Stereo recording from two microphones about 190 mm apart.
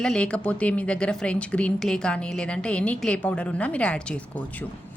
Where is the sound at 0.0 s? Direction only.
5° left (ahead or behind).